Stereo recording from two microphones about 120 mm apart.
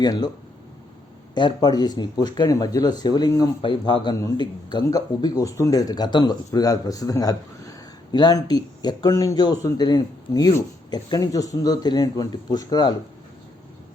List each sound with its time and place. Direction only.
0.0 s speech: 35° left (ahead or behind)
1.4 s speech: 35° left (ahead or behind)
3.6 s speech: 40° left (ahead or behind)